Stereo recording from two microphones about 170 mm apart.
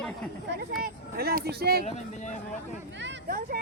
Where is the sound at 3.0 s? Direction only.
75° right (ahead or behind).